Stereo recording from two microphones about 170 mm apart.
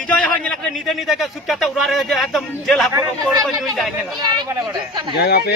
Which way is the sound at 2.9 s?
25° right (ahead or behind).